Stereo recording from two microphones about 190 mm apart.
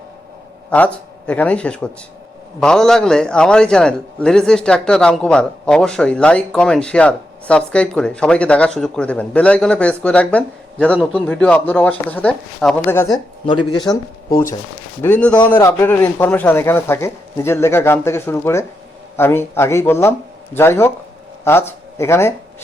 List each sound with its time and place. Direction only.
0.7 s a man's voice: 10° left (ahead or behind)
13.4 s speech: 25° left (ahead or behind)
15.0 s speech: 10° left (ahead or behind)